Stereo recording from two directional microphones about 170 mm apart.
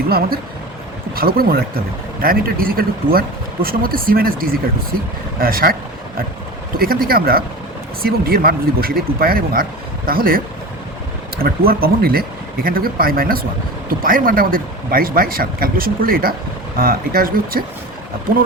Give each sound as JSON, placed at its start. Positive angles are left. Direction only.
{"t": 1.1, "sound": "speech", "side_deg": -60}
{"t": 6.7, "sound": "speech", "side_deg": -60}
{"t": 11.4, "sound": "speech", "side_deg": -60}